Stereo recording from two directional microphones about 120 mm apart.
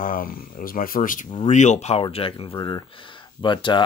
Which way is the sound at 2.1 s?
50° left (ahead or behind).